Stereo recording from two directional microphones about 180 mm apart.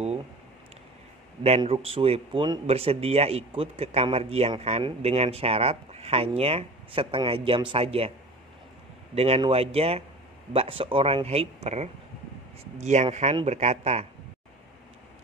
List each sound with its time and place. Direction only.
1.6 s a man's voice: 30° right (ahead or behind)
9.1 s a man's voice: 35° right (ahead or behind)